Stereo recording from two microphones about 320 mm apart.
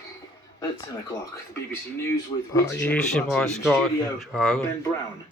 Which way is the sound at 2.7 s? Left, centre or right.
Centre.